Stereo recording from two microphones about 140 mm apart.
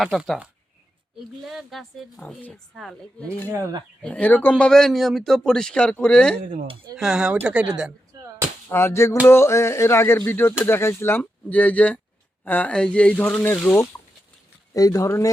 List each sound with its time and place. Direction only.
0.0 s speech: centre (ahead or behind)
1.5 s speech: centre (ahead or behind)
3.5 s speech: 25° right (ahead or behind)
4.0 s speech: 10° left (ahead or behind)
6.9 s speech: 5° right (ahead or behind)
8.7 s a sound: 20° left (ahead or behind)
10.7 s speech: 15° left (ahead or behind)
13.9 s rodents: 20° left (ahead or behind)
14.7 s a sound: 25° left (ahead or behind)